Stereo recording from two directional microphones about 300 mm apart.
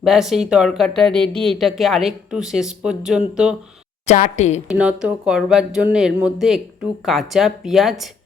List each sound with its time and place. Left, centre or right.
0.0 s speech: centre
4.0 s a woman's voice: left
4.7 s speech: centre